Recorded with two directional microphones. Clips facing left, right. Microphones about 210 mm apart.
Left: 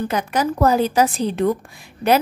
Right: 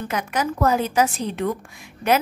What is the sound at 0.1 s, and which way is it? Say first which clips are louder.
A woman's voice: left 4 dB; 35° left (ahead or behind).